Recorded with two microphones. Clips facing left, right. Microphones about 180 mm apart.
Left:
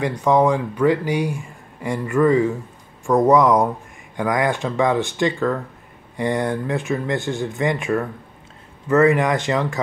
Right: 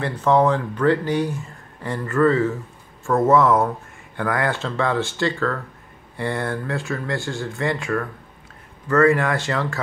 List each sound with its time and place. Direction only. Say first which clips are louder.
0.0 s speech: left 1 dB; 15° left (ahead or behind)